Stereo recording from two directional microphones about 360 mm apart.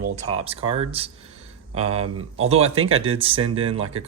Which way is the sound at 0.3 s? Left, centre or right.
Centre.